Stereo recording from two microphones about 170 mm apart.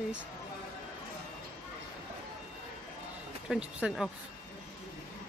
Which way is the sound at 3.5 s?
5° right (ahead or behind).